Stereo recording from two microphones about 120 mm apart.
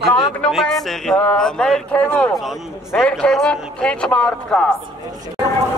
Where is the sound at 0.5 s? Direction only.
5° left (ahead or behind).